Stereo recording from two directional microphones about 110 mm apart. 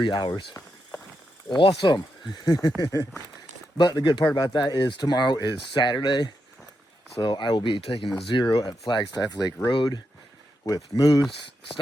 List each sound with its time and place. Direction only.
0.0 s speech: 45° left (ahead or behind)
1.5 s speech: 45° left (ahead or behind)
2.8 s speech: 30° left (ahead or behind)
3.8 s speech: 40° left (ahead or behind)